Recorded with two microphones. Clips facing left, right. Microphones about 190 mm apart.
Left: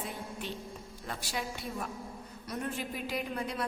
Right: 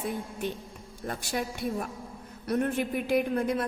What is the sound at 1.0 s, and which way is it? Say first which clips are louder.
A woman's voice: right 6 dB; 50° right (ahead or behind).